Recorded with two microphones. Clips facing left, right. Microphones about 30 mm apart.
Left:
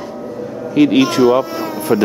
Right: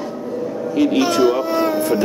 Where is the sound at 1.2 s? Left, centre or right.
Centre.